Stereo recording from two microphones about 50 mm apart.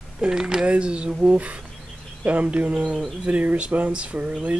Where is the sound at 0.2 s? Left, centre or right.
Centre.